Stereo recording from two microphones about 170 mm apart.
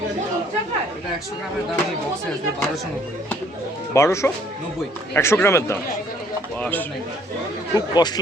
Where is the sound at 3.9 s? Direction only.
15° left (ahead or behind).